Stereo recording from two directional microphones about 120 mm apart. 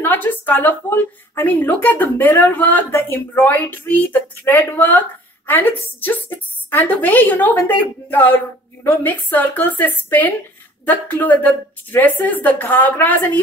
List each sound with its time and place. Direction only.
0.0 s a woman's voice: 15° left (ahead or behind)